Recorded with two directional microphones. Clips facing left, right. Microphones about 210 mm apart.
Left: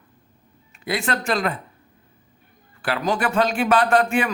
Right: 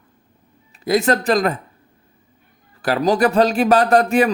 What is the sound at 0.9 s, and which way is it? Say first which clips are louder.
Speech: right 8 dB; 40° right (ahead or behind).